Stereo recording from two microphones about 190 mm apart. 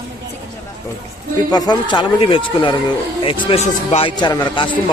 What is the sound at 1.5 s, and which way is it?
A man's voice, 20° left (ahead or behind).